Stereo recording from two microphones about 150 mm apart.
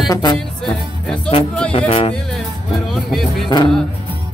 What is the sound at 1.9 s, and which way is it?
Music, 40° left (ahead or behind).